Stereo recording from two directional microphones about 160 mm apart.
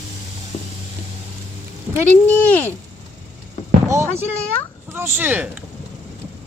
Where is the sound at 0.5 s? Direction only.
40° left (ahead or behind).